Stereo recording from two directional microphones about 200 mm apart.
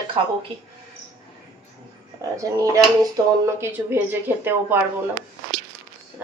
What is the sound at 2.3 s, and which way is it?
Speech, 15° right (ahead or behind).